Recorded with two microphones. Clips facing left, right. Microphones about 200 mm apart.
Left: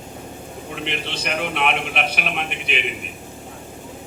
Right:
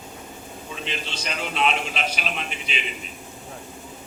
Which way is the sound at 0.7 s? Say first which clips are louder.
Left 4 dB; 65° left (ahead or behind).